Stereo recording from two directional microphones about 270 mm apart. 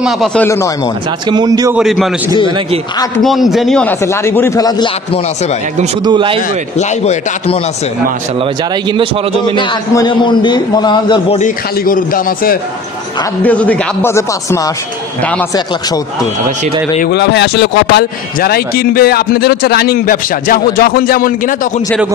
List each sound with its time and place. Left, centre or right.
0.0 s speech: centre
1.3 s a man's voice: centre
1.8 s a man's voice: centre
6.0 s a man's voice: centre
6.8 s speech: left
8.4 s speech: centre
9.6 s a man's voice: centre
13.4 s a man's voice: centre
17.0 s speech: left